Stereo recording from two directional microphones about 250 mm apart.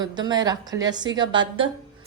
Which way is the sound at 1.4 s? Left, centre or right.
Right.